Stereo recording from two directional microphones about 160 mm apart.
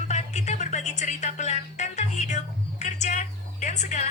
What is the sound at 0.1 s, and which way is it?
Music, 45° left (ahead or behind).